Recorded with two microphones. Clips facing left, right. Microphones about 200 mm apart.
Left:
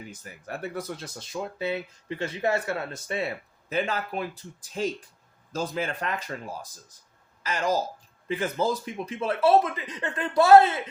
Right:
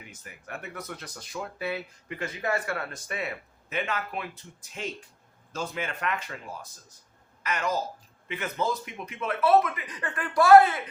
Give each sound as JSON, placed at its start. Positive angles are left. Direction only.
{"t": 0.0, "sound": "speech", "side_deg": 35}
{"t": 7.4, "sound": "speech", "side_deg": 30}